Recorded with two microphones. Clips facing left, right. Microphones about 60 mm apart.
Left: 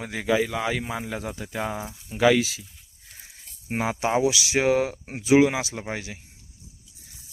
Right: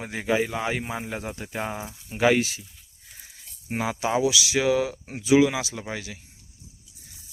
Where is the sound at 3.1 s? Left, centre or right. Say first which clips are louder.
Left 1 dB; centre.